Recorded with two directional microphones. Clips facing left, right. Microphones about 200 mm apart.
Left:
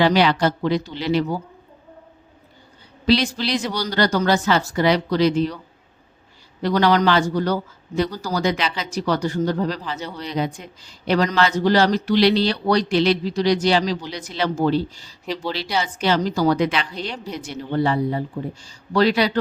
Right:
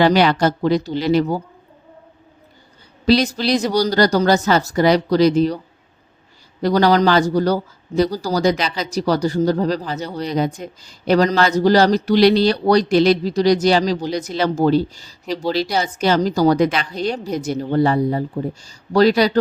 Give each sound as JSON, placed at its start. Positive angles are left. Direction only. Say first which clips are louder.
{"t": 0.0, "sound": "speech", "louder": "right 3 dB", "side_deg": -45}
{"t": 3.1, "sound": "a man's voice", "louder": "right 4 dB", "side_deg": -40}
{"t": 6.6, "sound": "a man's voice", "louder": "right 3 dB", "side_deg": -40}